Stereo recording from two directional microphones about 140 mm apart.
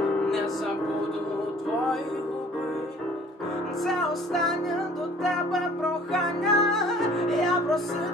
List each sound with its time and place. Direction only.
0.0 s music: centre (ahead or behind)
3.8 s music: centre (ahead or behind)